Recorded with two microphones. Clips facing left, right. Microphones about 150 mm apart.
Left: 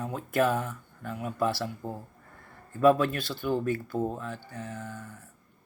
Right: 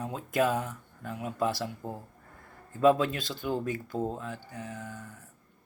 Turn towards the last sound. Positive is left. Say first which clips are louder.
# left 2 dB
turn(degrees=-15)  # may be behind; listen again after turning